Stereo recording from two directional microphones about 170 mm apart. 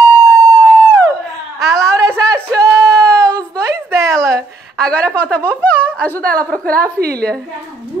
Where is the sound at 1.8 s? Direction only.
20° right (ahead or behind).